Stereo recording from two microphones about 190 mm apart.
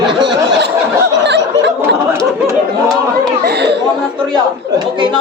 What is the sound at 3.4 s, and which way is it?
Chatter, 60° right (ahead or behind).